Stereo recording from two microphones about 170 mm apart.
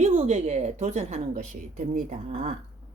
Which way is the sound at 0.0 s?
40° right (ahead or behind).